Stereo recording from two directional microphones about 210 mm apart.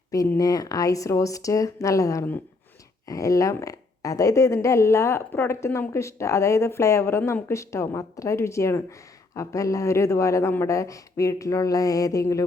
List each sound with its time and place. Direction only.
0.1 s speech: 15° left (ahead or behind)